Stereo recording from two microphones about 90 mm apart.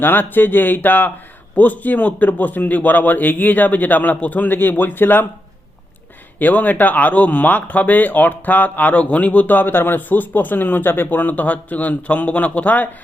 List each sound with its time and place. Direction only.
0.0 s speech: 20° left (ahead or behind)
6.4 s speech: 20° left (ahead or behind)